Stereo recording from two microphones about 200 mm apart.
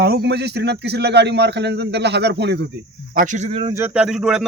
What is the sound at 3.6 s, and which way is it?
Speech, 15° right (ahead or behind).